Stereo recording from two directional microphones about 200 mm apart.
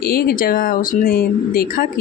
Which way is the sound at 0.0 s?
50° left (ahead or behind).